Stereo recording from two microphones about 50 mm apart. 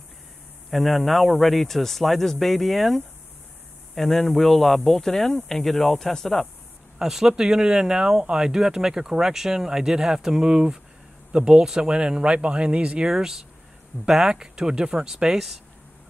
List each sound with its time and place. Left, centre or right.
0.7 s speech: centre
7.0 s speech: centre